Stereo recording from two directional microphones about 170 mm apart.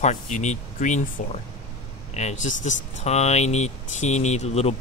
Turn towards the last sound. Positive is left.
turn(degrees=40)  # may be behind; listen again after turning